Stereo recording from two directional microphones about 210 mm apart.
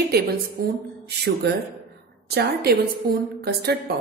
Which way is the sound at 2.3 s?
50° right (ahead or behind).